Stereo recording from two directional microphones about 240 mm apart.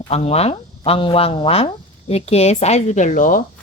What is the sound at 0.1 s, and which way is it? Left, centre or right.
Speech, left.